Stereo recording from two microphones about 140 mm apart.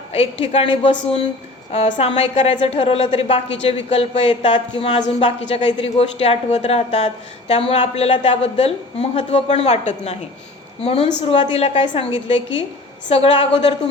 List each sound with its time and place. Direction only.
0.1 s a woman's voice: 45° left (ahead or behind)